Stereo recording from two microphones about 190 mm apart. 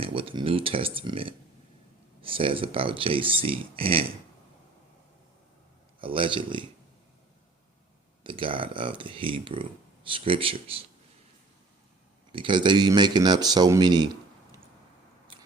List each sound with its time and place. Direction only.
0.0 s speech: 30° right (ahead or behind)
6.0 s speech: 25° right (ahead or behind)
8.2 s speech: 25° right (ahead or behind)
12.3 s speech: 25° right (ahead or behind)